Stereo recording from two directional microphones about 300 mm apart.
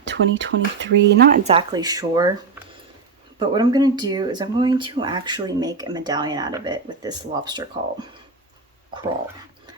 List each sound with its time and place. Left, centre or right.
0.0 s speech: right
1.5 s speech: centre
3.3 s speech: centre